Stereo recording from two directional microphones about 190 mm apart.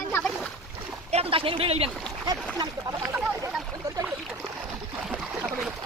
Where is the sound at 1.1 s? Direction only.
30° right (ahead or behind).